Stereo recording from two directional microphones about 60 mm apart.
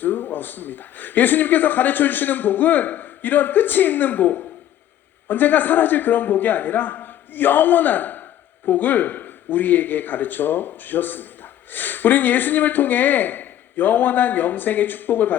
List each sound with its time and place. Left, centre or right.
0.0 s a man's voice: left